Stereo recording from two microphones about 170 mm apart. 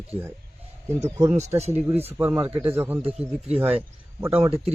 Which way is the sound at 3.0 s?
40° right (ahead or behind).